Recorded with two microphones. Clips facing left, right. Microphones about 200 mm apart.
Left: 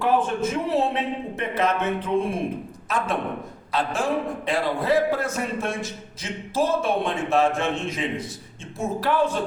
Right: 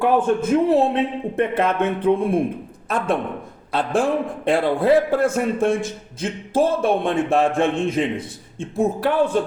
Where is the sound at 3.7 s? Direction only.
55° right (ahead or behind).